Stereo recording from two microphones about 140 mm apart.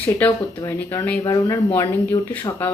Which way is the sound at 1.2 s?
25° left (ahead or behind).